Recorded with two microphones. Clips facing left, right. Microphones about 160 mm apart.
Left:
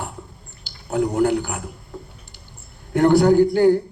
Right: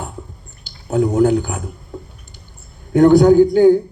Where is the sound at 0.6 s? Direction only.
45° right (ahead or behind).